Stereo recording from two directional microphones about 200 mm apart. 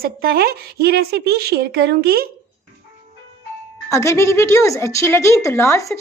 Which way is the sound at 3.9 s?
15° left (ahead or behind).